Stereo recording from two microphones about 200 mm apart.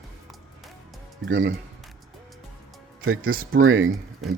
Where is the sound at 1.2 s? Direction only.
75° right (ahead or behind).